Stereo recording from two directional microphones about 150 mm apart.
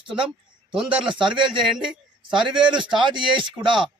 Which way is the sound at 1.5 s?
5° right (ahead or behind).